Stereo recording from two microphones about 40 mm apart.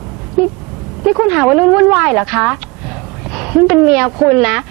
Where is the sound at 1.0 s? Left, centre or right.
Right.